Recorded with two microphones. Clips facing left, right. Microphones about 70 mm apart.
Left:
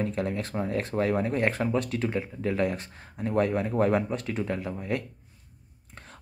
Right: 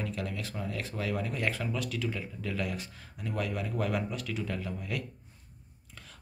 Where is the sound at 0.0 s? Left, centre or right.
Left.